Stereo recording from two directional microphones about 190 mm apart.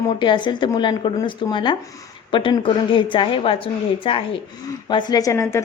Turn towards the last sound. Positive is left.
turn(degrees=15)  # may be behind; listen again after turning